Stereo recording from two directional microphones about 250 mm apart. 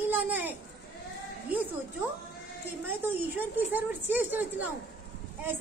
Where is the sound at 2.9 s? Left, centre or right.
Centre.